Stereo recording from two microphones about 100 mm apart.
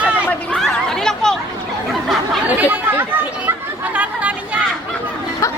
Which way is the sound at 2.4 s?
15° right (ahead or behind).